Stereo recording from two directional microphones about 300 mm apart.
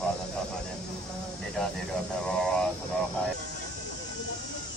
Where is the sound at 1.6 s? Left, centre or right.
Centre.